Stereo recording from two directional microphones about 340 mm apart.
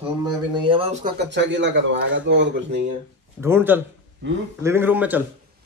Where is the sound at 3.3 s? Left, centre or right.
Centre.